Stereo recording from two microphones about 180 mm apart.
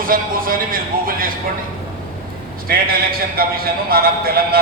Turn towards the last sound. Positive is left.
turn(degrees=-55)  # may be behind; listen again after turning